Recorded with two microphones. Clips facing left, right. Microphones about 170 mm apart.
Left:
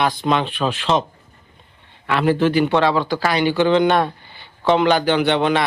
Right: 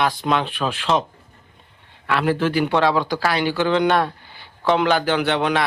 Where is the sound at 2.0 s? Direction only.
Centre (ahead or behind).